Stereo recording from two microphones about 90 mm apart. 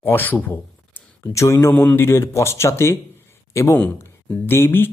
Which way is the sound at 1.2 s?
35° left (ahead or behind).